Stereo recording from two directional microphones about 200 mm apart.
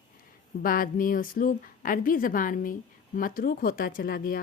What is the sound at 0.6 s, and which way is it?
A woman's voice, 45° left (ahead or behind).